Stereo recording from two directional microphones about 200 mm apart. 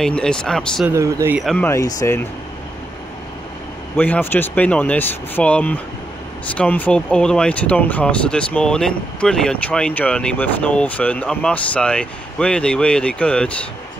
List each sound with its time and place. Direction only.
0.0 s speech: 5° left (ahead or behind)
0.8 s speech: 15° right (ahead or behind)
1.4 s speech: centre (ahead or behind)
1.7 s speech: 15° left (ahead or behind)
3.9 s speech: 10° left (ahead or behind)